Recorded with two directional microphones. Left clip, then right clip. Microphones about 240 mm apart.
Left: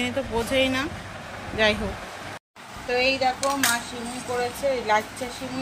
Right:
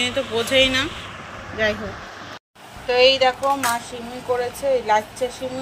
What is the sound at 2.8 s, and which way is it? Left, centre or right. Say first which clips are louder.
Speech: right 7 dB; centre.